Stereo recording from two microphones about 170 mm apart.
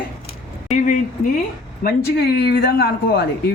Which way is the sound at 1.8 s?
70° left (ahead or behind).